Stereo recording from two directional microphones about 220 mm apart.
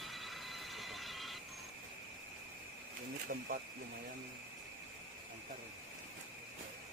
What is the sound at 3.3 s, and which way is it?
Speech, 40° right (ahead or behind).